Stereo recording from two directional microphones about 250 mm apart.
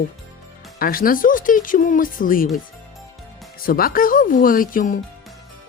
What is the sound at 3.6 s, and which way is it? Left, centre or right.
Speech, left.